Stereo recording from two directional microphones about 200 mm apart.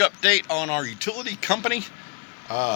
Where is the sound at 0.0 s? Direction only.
5° right (ahead or behind).